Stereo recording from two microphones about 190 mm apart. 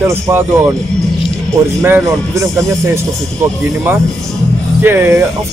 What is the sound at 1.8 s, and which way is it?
Speech, 15° right (ahead or behind).